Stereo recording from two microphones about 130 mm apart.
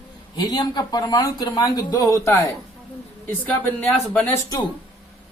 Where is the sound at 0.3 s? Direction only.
30° left (ahead or behind).